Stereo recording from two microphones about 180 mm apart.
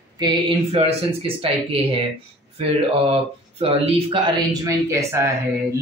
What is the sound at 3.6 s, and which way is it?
Speech, 30° right (ahead or behind).